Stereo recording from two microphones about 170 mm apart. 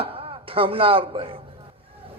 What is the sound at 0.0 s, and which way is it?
Speech, 35° right (ahead or behind).